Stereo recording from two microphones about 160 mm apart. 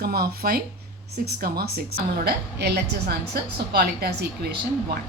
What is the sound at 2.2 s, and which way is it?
A woman's voice, 85° right.